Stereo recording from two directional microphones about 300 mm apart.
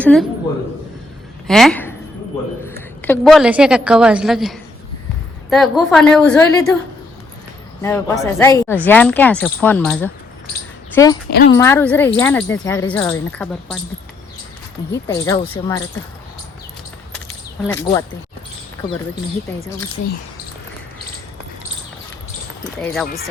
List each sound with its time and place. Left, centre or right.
0.0 s a woman's voice: centre
1.5 s a woman's voice: centre
7.8 s a woman's voice: centre
11.3 s speech: left
11.5 s speech: centre
15.0 s speech: centre
17.7 s speech: centre
22.8 s a woman's voice: centre